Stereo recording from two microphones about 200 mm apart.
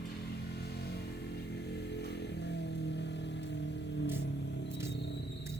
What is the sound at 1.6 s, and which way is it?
Vehicle, 55° left (ahead or behind).